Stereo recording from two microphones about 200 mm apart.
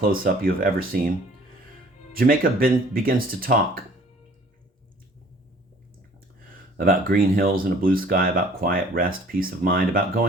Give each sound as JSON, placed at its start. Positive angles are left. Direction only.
{"t": 0.0, "sound": "speech", "side_deg": -45}
{"t": 2.1, "sound": "speech", "side_deg": -45}
{"t": 6.7, "sound": "speech", "side_deg": -45}